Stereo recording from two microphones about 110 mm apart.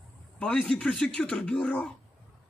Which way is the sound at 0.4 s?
10° left (ahead or behind).